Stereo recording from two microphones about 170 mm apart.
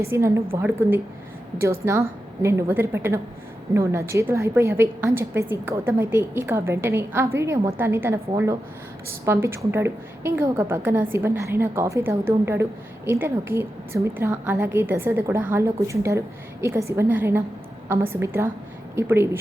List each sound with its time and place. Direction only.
0.1 s a woman's voice: 15° right (ahead or behind)
9.2 s a woman's voice: 15° right (ahead or behind)